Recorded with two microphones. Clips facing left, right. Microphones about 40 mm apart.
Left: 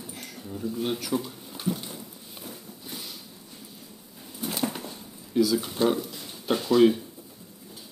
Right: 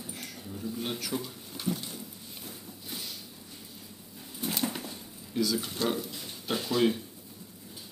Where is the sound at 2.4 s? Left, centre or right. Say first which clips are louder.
Left 4 dB; centre.